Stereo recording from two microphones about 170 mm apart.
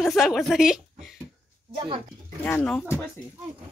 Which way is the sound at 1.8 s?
30° right (ahead or behind).